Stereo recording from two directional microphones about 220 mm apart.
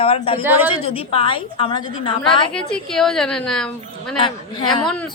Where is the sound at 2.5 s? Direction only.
5° left (ahead or behind).